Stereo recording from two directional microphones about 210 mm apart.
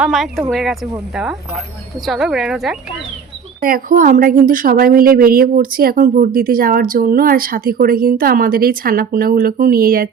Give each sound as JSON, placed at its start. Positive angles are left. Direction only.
{"t": 0.0, "sound": "speech", "side_deg": 0}
{"t": 3.6, "sound": "a woman's voice", "side_deg": -40}